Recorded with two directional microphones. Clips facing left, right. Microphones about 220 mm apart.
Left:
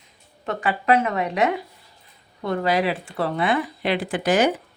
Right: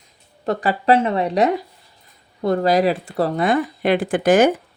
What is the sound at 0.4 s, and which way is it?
A woman's voice, 35° right (ahead or behind).